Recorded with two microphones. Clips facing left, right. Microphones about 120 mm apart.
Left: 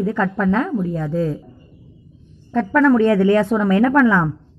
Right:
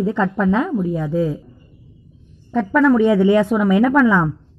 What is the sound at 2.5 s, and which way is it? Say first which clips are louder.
A woman's voice: even; 5° right (ahead or behind).